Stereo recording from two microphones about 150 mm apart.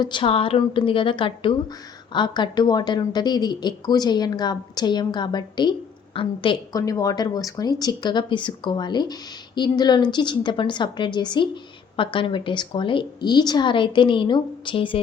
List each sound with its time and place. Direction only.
0.0 s a woman's voice: 35° left (ahead or behind)